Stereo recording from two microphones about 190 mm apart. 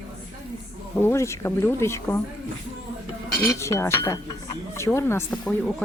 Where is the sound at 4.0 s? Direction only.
25° left (ahead or behind).